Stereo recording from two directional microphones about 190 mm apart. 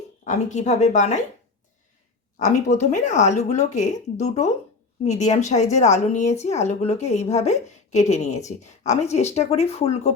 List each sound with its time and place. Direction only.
0.3 s a woman's voice: 40° left (ahead or behind)
2.4 s a woman's voice: 40° left (ahead or behind)